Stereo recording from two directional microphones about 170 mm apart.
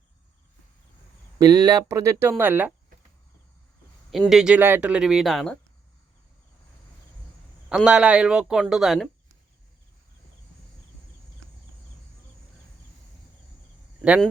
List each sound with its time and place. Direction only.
1.4 s speech: 20° right (ahead or behind)
4.1 s speech: centre (ahead or behind)
7.7 s speech: 5° right (ahead or behind)